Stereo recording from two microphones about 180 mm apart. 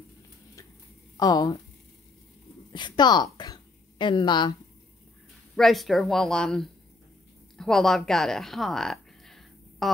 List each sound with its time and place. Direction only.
1.1 s speech: 20° left (ahead or behind)
2.7 s a woman's voice: 25° left (ahead or behind)
5.6 s speech: centre (ahead or behind)